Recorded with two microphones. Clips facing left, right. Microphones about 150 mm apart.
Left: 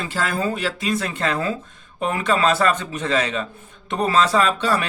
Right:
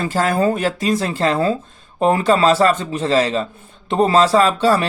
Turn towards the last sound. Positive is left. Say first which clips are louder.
# right 5 dB
turn(degrees=-30)  # may be behind; listen again after turning